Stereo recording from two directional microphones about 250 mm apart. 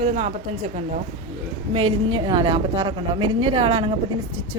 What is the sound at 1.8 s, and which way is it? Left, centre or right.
A woman's voice, right.